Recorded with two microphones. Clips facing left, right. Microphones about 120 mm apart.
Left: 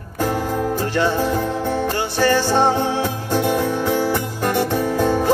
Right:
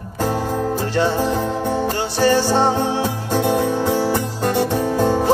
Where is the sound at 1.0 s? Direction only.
15° right (ahead or behind).